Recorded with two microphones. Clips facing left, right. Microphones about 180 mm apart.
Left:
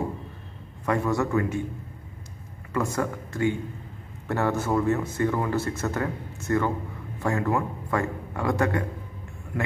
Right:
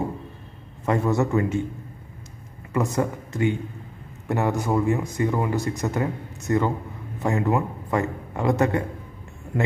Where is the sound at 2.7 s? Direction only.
20° right (ahead or behind).